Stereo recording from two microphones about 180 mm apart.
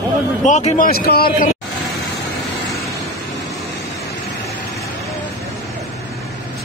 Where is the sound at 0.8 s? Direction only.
60° left (ahead or behind).